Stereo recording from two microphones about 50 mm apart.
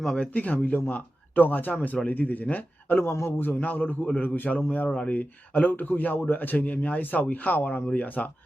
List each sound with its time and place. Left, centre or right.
0.2 s speech: left
3.0 s a man's voice: left
3.2 s speech: left